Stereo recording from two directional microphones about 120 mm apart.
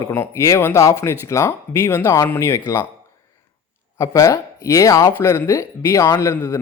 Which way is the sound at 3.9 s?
25° left (ahead or behind).